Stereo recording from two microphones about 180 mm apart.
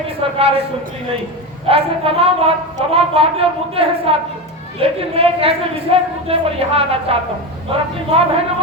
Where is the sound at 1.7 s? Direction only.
30° right (ahead or behind).